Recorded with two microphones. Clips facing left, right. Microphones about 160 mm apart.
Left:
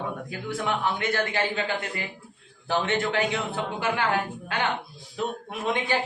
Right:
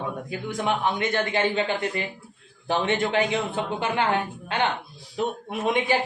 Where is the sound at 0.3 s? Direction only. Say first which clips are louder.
Right 4 dB; 20° right (ahead or behind).